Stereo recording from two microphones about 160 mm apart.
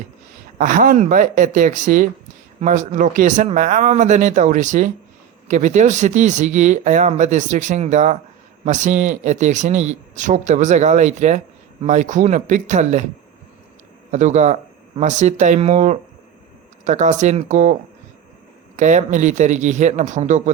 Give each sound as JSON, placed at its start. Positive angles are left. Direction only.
{"t": 0.6, "sound": "speech", "side_deg": -55}
{"t": 14.1, "sound": "speech", "side_deg": -45}
{"t": 18.8, "sound": "speech", "side_deg": -50}